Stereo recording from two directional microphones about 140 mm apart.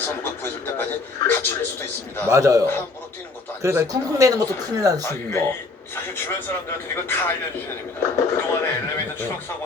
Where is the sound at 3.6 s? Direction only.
20° right (ahead or behind).